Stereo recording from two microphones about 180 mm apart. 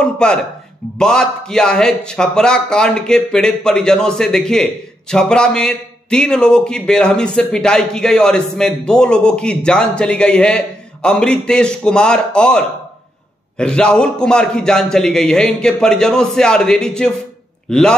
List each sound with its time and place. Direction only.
0.0 s a man's voice: 5° left (ahead or behind)